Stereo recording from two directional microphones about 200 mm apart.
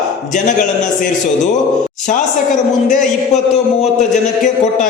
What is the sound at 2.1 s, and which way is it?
A man's voice, 40° left (ahead or behind).